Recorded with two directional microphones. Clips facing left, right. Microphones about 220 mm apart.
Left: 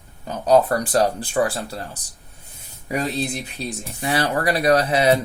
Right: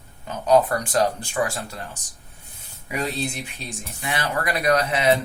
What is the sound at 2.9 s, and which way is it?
Speech, 40° left (ahead or behind).